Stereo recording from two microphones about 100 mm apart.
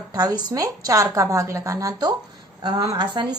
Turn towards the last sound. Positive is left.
turn(degrees=-50)  # may be behind; listen again after turning